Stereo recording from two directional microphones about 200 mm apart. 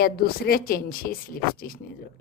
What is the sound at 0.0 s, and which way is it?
A woman's voice, 50° left (ahead or behind).